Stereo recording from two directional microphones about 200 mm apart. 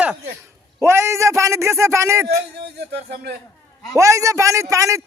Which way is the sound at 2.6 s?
55° right (ahead or behind).